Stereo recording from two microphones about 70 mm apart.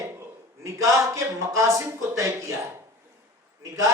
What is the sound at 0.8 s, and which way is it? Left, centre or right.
A woman's voice, right.